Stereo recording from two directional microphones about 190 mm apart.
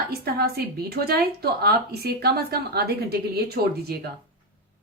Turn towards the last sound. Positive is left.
turn(degrees=-55)  # may be behind; listen again after turning